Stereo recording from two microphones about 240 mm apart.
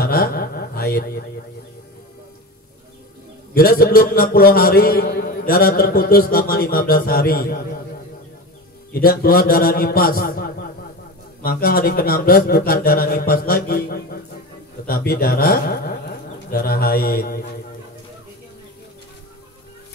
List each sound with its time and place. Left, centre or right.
0.0 s a sound: left
3.5 s a man's voice: left
8.9 s a man's voice: left